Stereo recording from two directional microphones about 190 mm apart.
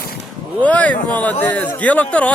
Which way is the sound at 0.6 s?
5° left (ahead or behind).